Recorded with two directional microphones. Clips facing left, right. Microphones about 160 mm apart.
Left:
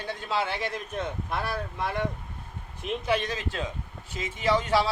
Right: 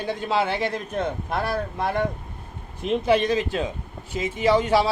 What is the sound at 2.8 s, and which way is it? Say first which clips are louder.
Speech: right 7 dB; 25° right (ahead or behind).